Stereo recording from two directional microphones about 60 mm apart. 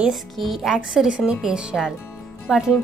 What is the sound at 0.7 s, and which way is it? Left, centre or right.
Speech, centre.